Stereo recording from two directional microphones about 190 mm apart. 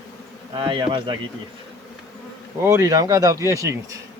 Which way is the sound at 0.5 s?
25° right (ahead or behind).